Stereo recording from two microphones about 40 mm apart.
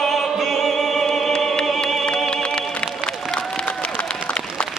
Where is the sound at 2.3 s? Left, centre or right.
Left.